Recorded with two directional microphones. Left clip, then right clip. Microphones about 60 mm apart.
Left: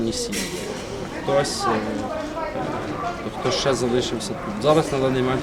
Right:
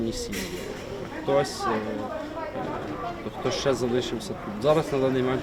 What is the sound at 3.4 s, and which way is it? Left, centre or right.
A man's voice, left.